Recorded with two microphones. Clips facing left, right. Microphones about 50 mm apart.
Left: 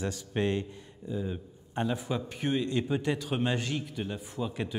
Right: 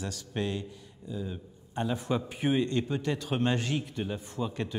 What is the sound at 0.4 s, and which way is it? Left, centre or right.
Speech, left.